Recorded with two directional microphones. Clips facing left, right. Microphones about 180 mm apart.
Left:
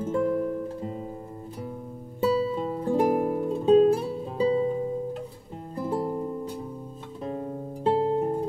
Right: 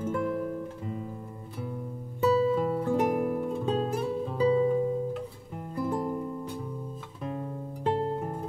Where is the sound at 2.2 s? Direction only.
25° left (ahead or behind).